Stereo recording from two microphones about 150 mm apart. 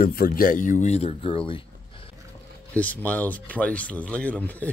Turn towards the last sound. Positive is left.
turn(degrees=10)  # may be behind; listen again after turning